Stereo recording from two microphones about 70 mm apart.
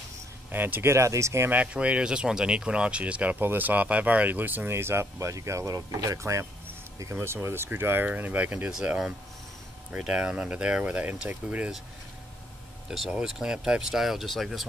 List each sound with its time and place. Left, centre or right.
0.5 s speech: right
0.8 s speech: right
1.5 s speech: centre
8.7 s speech: centre
13.2 s speech: centre